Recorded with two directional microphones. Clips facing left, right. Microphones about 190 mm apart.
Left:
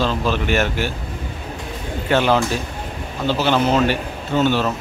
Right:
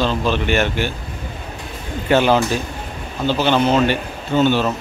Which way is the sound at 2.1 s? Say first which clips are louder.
Right 2 dB; 5° right (ahead or behind).